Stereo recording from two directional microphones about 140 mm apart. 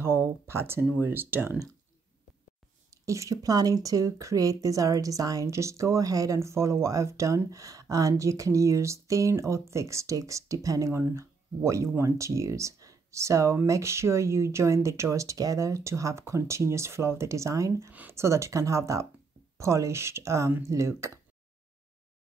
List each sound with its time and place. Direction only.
0.0 s speech: 20° right (ahead or behind)
2.9 s speech: 25° right (ahead or behind)